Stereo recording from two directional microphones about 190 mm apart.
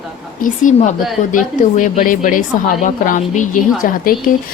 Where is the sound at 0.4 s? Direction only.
45° left (ahead or behind).